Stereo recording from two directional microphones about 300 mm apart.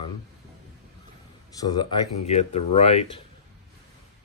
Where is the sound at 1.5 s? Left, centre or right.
Centre.